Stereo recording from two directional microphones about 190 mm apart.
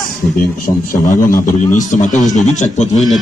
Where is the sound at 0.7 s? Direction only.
45° left (ahead or behind).